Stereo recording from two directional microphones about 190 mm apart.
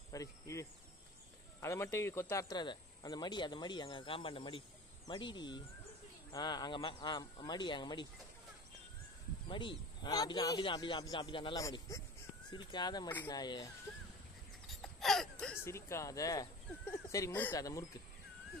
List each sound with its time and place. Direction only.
0.1 s speech: 15° left (ahead or behind)
9.5 s speech: 25° left (ahead or behind)
14.7 s a sound: centre (ahead or behind)
15.6 s speech: 15° left (ahead or behind)